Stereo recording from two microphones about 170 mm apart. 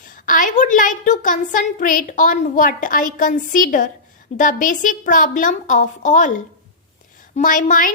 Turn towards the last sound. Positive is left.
turn(degrees=50)  # may be behind; listen again after turning